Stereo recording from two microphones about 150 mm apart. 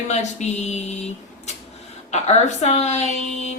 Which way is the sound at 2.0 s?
50° left (ahead or behind).